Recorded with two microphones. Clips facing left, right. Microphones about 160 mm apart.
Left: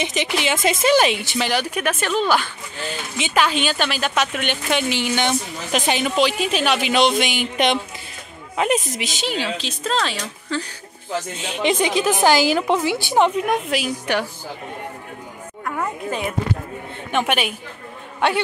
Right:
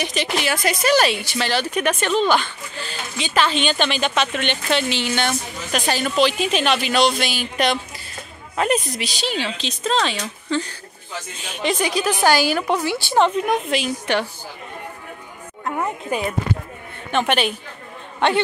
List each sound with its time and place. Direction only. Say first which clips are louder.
0.0 s speech: left 1 dB; 20° left (ahead or behind)
2.9 s speech: left 2 dB; 20° left (ahead or behind)
3.4 s speech: right 1 dB; 5° left (ahead or behind)
11.6 s a woman's voice: left 2 dB; 20° left (ahead or behind)
15.6 s a sound: right 1 dB; 15° right (ahead or behind)
17.1 s speech: right 1 dB; 10° left (ahead or behind)